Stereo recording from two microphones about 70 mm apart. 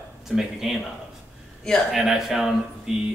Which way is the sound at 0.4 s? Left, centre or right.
Centre.